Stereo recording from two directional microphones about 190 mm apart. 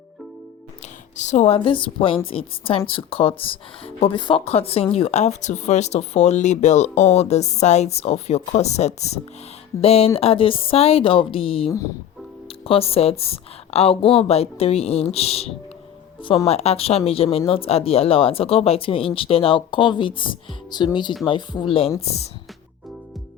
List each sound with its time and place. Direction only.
1.1 s a woman's voice: 40° left (ahead or behind)